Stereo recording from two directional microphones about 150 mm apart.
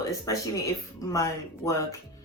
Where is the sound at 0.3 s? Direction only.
20° left (ahead or behind).